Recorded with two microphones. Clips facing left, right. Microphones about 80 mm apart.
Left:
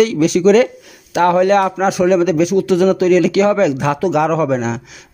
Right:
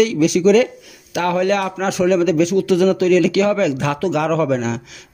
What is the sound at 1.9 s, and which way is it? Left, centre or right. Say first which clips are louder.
Speech: right 1 dB; centre.